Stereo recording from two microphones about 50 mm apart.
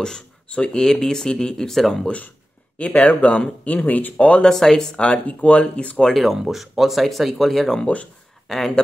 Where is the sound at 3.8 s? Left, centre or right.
Left.